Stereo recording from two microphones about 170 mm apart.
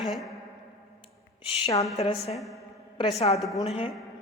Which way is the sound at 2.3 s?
Centre (ahead or behind).